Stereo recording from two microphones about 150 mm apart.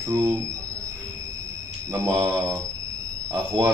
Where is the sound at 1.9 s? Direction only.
20° right (ahead or behind).